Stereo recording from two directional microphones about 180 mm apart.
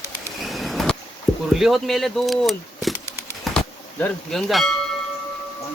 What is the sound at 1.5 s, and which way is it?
Speech, centre (ahead or behind).